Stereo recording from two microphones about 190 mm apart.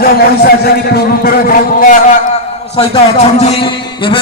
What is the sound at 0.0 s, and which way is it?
A man's voice, 55° left (ahead or behind).